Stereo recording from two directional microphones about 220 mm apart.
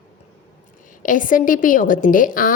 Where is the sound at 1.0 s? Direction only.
40° left (ahead or behind).